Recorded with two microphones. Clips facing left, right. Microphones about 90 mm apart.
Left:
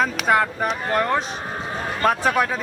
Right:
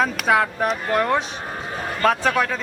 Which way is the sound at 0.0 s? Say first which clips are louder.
Even; centre (ahead or behind).